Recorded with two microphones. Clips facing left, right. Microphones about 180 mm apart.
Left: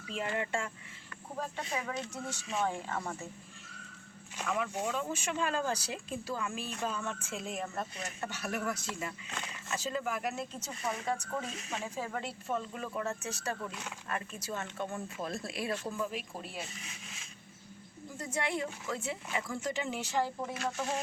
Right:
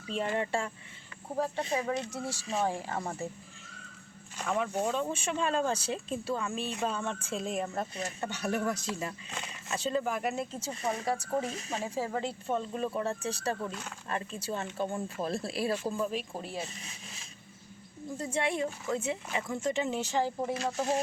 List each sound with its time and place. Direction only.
0.1 s speech: 30° right (ahead or behind)
4.4 s speech: 30° right (ahead or behind)